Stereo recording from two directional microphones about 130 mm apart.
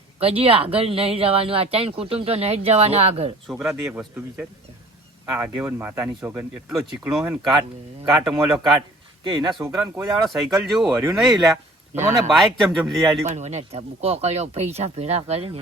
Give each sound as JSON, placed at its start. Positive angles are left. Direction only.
{"t": 0.2, "sound": "speech", "side_deg": -50}
{"t": 3.5, "sound": "speech", "side_deg": -5}
{"t": 9.2, "sound": "speech", "side_deg": -35}
{"t": 9.6, "sound": "speech", "side_deg": -20}
{"t": 10.2, "sound": "speech", "side_deg": 0}
{"t": 11.9, "sound": "speech", "side_deg": -65}
{"t": 12.3, "sound": "speech", "side_deg": 0}
{"t": 13.2, "sound": "speech", "side_deg": -60}